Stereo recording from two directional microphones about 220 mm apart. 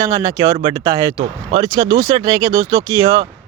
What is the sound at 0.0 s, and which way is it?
Speech, 15° right (ahead or behind).